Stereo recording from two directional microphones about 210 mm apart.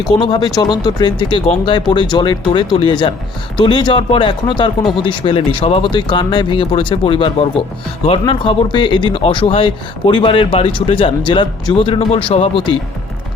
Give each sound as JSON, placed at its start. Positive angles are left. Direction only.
{"t": 0.0, "sound": "speech", "side_deg": 20}